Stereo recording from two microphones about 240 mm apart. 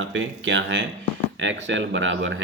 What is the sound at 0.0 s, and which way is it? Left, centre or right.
Speech, right.